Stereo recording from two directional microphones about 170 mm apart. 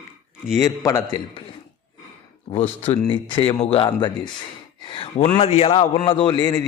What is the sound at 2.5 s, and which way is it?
A man's voice, 35° left (ahead or behind).